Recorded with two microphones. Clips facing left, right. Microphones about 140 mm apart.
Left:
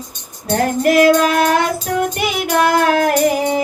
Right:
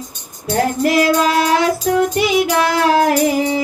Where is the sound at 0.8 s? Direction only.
50° left (ahead or behind).